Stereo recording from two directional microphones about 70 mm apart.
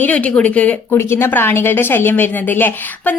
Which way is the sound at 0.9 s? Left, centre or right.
Left.